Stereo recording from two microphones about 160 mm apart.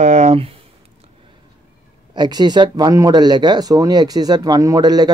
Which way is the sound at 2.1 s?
25° right (ahead or behind).